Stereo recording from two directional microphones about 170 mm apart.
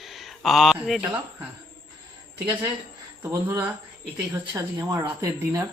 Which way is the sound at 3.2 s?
15° right (ahead or behind).